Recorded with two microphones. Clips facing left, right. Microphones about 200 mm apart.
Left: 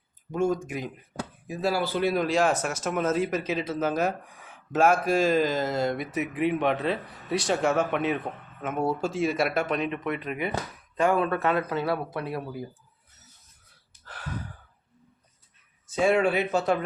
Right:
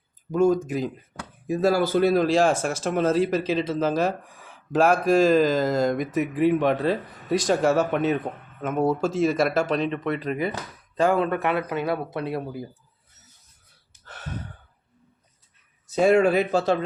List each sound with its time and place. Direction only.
0.3 s speech: 40° right (ahead or behind)
14.0 s gasp: 25° right (ahead or behind)
15.9 s speech: 40° right (ahead or behind)